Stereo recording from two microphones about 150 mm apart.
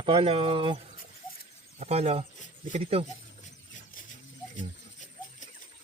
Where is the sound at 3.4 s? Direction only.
55° left (ahead or behind).